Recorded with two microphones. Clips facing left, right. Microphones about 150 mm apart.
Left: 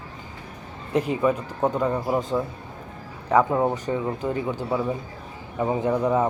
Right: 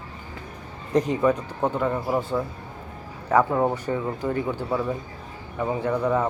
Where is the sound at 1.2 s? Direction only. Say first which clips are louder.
Even; 10° left (ahead or behind).